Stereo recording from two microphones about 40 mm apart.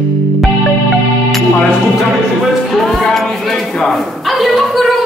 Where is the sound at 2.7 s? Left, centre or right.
Centre.